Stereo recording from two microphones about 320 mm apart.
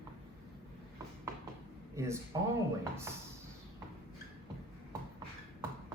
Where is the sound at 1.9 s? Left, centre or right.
Centre.